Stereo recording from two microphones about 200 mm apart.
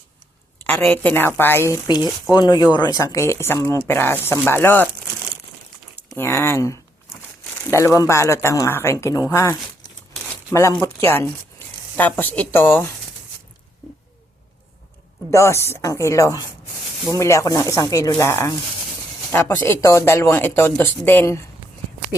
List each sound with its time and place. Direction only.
0.7 s a woman's voice: 10° left (ahead or behind)
6.1 s speech: 10° left (ahead or behind)
15.3 s speech: 15° left (ahead or behind)